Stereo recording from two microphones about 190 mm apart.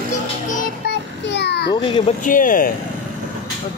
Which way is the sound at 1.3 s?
60° left (ahead or behind).